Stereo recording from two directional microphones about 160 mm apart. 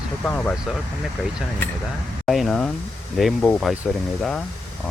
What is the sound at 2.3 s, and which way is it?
Speech, centre (ahead or behind).